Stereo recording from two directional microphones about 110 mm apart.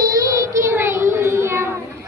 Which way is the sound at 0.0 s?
30° right (ahead or behind).